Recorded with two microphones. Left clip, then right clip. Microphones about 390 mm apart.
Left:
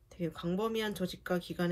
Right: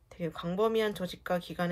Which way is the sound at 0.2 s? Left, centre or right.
Centre.